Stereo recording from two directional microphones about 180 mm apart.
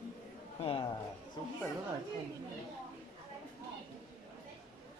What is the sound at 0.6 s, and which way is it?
Speech, 25° left (ahead or behind).